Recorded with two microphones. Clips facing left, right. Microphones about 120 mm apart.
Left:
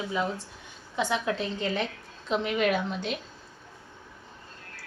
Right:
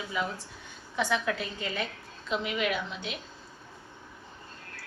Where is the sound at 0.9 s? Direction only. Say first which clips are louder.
Left 1 dB; 20° left (ahead or behind); by 3.1 s 45° left (ahead or behind).